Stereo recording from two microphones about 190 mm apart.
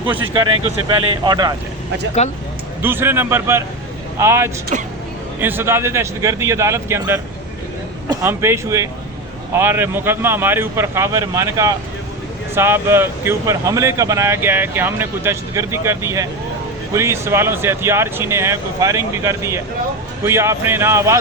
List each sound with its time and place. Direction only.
0.6 s speech: 25° right (ahead or behind)
2.2 s speech: 35° left (ahead or behind)
2.8 s speech: 10° right (ahead or behind)